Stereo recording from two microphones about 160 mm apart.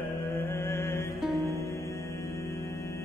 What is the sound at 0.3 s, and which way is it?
Mantra, 15° left (ahead or behind).